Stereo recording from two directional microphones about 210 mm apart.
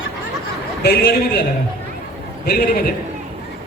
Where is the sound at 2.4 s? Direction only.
45° left (ahead or behind).